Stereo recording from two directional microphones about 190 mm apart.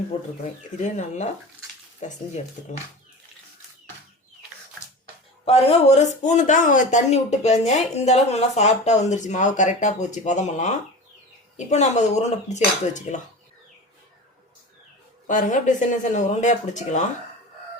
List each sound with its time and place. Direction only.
0.8 s speech: 40° left (ahead or behind)
5.5 s speech: 35° left (ahead or behind)
15.3 s speech: 40° left (ahead or behind)